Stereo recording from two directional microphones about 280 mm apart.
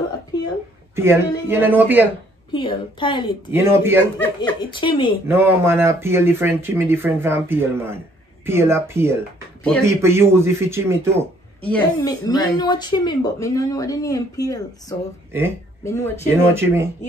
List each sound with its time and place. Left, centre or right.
0.3 s a sound: centre
0.9 s speech: centre
2.5 s speech: centre
3.5 s speech: centre
4.2 s speech: centre
5.3 s speech: centre
11.7 s speech: centre
16.5 s speech: centre